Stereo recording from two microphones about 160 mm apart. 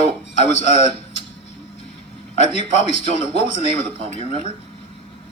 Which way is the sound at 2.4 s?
45° left (ahead or behind).